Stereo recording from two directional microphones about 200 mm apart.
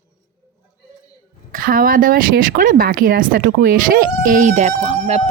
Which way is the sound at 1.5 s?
45° right (ahead or behind).